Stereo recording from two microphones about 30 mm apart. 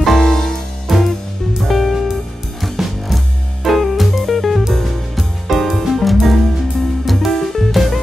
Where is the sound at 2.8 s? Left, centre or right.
Centre.